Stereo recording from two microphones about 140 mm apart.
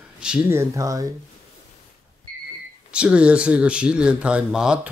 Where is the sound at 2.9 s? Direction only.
10° right (ahead or behind).